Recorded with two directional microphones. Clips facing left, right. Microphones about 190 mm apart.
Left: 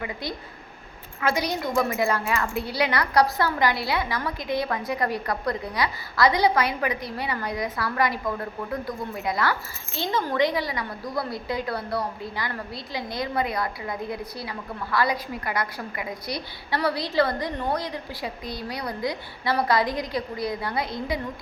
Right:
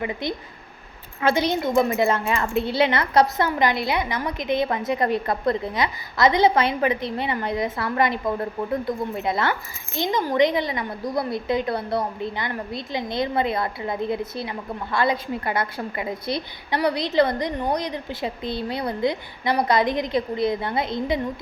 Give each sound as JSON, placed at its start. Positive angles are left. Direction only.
{"t": 0.0, "sound": "a woman's voice", "side_deg": -20}